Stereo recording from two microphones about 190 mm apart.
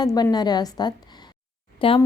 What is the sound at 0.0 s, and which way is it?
A woman's voice, 20° left (ahead or behind).